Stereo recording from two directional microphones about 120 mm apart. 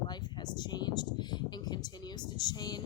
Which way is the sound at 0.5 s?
35° left (ahead or behind).